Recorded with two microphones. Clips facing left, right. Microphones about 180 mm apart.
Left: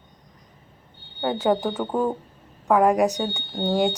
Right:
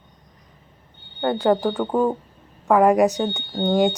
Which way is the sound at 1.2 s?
Centre (ahead or behind).